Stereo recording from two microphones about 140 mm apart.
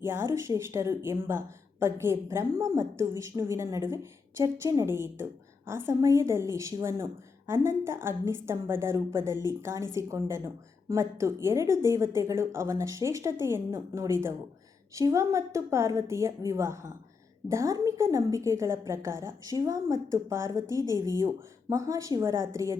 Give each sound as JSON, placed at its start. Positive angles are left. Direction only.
{"t": 0.0, "sound": "speech", "side_deg": -15}